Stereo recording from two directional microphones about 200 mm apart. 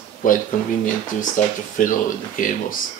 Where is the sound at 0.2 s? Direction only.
40° left (ahead or behind).